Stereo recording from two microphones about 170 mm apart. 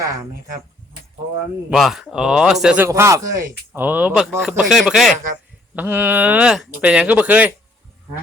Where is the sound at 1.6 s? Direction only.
Centre (ahead or behind).